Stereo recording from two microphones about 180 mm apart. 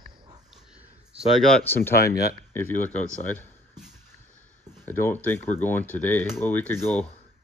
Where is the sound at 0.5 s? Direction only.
5° right (ahead or behind).